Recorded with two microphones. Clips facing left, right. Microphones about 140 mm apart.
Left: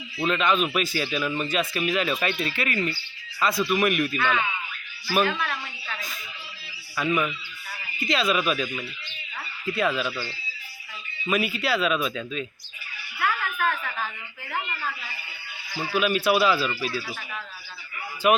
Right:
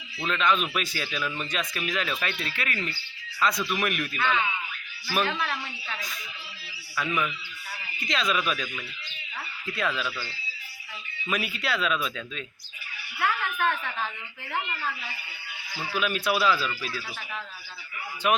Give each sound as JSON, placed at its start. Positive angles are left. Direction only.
{"t": 0.3, "sound": "speech", "side_deg": 5}
{"t": 7.0, "sound": "speech", "side_deg": 5}
{"t": 9.7, "sound": "speech", "side_deg": 5}
{"t": 10.1, "sound": "speech", "side_deg": 20}
{"t": 11.3, "sound": "speech", "side_deg": 5}
{"t": 13.1, "sound": "a sound", "side_deg": 5}
{"t": 15.9, "sound": "speech", "side_deg": 5}
{"t": 18.2, "sound": "speech", "side_deg": 5}